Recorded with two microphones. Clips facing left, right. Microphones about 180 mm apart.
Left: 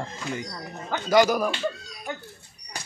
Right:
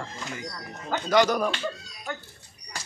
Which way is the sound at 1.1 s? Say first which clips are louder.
Left 2 dB; 5° left (ahead or behind).